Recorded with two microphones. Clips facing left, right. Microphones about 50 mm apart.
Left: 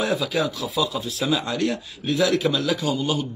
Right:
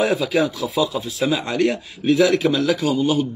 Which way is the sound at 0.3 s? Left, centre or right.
Right.